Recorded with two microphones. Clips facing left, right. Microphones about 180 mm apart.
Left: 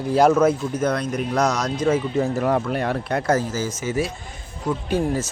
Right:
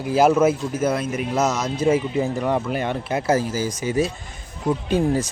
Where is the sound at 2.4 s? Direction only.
Centre (ahead or behind).